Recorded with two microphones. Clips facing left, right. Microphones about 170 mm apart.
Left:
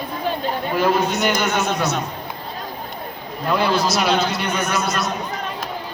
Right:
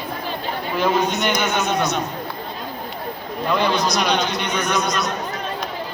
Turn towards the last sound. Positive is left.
turn(degrees=5)  # may be behind; listen again after turning